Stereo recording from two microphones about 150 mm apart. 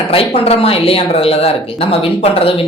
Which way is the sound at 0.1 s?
40° left (ahead or behind).